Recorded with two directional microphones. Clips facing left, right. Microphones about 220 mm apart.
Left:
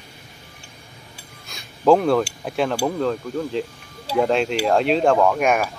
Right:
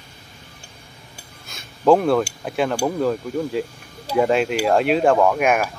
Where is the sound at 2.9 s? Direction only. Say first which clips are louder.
Right 1 dB; 10° right (ahead or behind).